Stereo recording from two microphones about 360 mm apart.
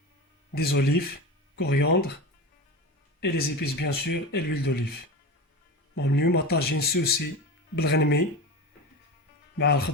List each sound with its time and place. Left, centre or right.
0.5 s speech: left
3.2 s speech: left
9.6 s speech: left